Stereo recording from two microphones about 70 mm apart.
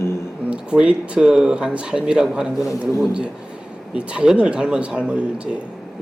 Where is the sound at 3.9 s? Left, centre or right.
Centre.